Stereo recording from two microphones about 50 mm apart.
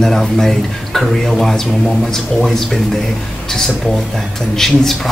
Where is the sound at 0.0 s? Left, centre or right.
Centre.